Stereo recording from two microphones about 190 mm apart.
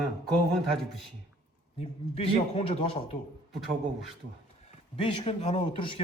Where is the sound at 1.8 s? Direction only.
30° left (ahead or behind).